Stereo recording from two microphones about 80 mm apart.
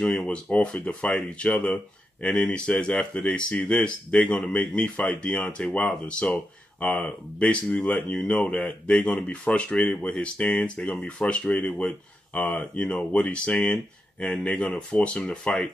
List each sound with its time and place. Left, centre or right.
0.0 s speech: centre